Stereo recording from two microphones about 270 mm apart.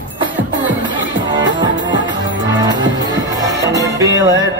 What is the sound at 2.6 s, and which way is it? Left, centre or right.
Music, centre.